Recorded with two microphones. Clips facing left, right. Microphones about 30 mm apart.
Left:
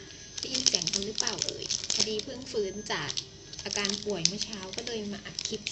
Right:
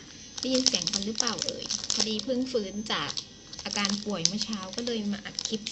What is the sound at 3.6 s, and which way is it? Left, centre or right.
Speech, right.